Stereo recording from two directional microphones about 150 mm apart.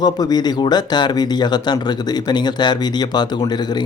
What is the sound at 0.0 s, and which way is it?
Speech, 25° left (ahead or behind).